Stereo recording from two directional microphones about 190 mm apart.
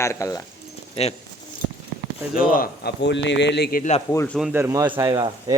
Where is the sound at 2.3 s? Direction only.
50° left (ahead or behind).